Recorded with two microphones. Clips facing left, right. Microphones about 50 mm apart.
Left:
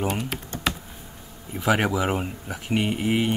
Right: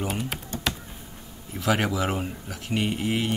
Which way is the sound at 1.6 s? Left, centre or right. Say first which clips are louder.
Left 2 dB; centre.